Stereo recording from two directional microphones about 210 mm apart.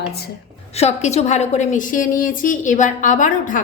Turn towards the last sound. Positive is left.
turn(degrees=40)  # may be behind; listen again after turning